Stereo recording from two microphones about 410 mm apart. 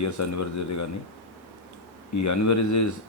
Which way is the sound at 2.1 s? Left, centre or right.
Left.